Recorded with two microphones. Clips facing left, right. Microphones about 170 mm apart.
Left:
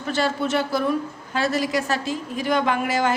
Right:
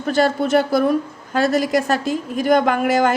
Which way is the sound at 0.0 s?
45° right (ahead or behind).